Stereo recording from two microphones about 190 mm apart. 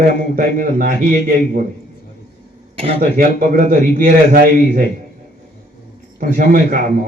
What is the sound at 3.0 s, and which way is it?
A man's voice, 45° right (ahead or behind).